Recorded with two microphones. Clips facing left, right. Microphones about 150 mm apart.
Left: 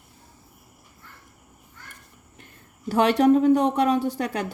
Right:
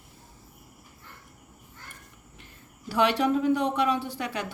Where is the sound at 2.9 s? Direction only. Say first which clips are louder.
Left 6 dB; 45° left (ahead or behind).